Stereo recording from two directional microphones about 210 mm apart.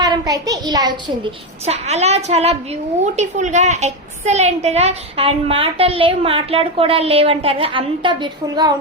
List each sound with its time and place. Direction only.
0.0 s a child's voice: 20° right (ahead or behind)
1.6 s a woman's voice: 30° right (ahead or behind)